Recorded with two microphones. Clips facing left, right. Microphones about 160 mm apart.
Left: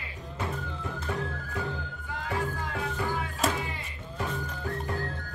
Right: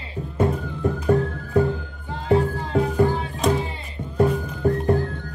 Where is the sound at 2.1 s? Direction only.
30° right (ahead or behind).